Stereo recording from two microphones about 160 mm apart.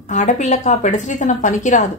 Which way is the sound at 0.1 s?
50° left (ahead or behind).